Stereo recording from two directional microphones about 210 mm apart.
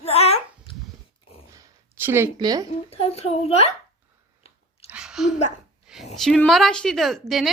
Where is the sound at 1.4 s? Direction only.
10° right (ahead or behind).